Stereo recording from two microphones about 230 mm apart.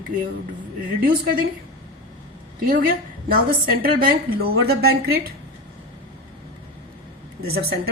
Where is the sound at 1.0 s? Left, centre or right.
Right.